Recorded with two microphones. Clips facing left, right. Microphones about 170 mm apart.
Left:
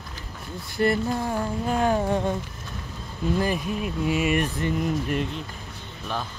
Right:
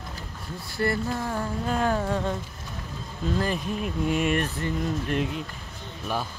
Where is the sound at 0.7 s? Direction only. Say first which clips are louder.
Left 4 dB; 20° left (ahead or behind).